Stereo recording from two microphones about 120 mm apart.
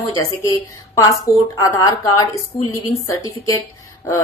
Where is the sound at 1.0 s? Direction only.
25° left (ahead or behind).